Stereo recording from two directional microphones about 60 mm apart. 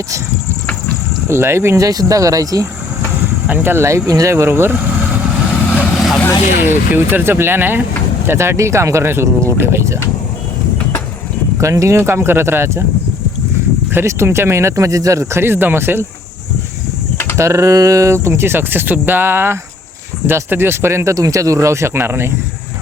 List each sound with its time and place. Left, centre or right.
1.3 s speech: right
1.7 s speech: right
3.4 s speech: right
3.8 s speech: right
4.4 s speech: right
5.9 s vehicle: centre
6.6 s speech: right
8.5 s speech: right
11.5 s speech: right
11.9 s speech: right
13.9 s speech: right
14.8 s speech: right
17.3 s speech: right
21.2 s speech: right